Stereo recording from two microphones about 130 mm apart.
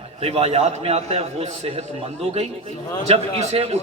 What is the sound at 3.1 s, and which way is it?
Speech, 55° right (ahead or behind).